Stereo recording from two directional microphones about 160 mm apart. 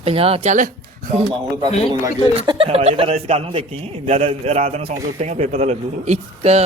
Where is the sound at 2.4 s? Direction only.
35° right (ahead or behind).